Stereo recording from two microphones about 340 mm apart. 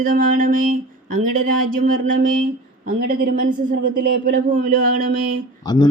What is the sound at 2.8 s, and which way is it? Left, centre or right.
Speech, right.